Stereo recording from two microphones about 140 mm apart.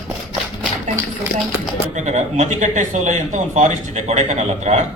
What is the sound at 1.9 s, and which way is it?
Speech, 60° right (ahead or behind).